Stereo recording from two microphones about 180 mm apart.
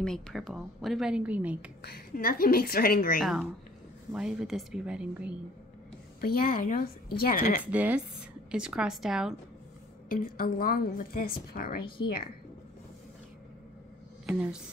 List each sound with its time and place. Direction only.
0.0 s speech: centre (ahead or behind)
1.8 s a woman's voice: 60° left (ahead or behind)
3.2 s speech: centre (ahead or behind)
6.2 s a woman's voice: 55° left (ahead or behind)
7.6 s speech: 10° right (ahead or behind)
10.0 s a woman's voice: 50° left (ahead or behind)
14.2 s speech: 5° right (ahead or behind)